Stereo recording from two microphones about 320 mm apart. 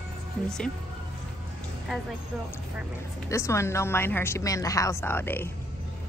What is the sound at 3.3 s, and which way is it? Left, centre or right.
A woman's voice, centre.